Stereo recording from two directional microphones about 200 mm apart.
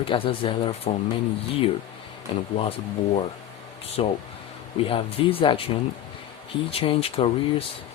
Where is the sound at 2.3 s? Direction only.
25° left (ahead or behind).